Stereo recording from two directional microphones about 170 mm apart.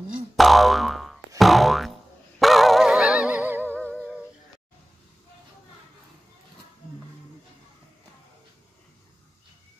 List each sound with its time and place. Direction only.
0.4 s boing: centre (ahead or behind)
3.6 s music: 10° left (ahead or behind)